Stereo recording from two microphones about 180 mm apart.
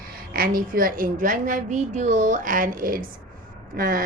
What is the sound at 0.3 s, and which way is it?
A woman's voice, 55° right (ahead or behind).